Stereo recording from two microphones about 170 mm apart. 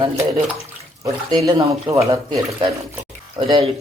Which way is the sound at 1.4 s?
20° right (ahead or behind).